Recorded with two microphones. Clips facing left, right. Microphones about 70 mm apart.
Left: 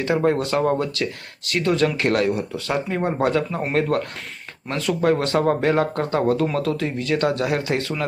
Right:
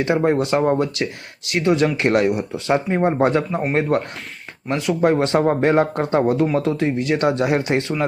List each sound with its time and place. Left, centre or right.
0.0 s speech: right